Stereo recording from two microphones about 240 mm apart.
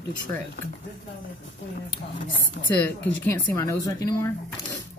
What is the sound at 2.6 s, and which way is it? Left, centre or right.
Speech, left.